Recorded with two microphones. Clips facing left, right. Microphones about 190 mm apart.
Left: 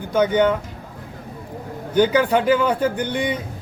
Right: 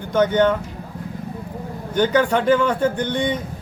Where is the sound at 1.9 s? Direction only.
5° left (ahead or behind).